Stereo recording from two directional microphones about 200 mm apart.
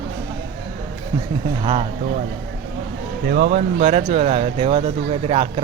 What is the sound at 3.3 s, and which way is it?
Speech, 45° right (ahead or behind).